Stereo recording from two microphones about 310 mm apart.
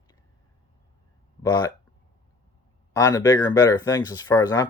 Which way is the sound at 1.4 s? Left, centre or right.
Centre.